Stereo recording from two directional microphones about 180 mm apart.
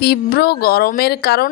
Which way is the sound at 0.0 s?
60° left (ahead or behind).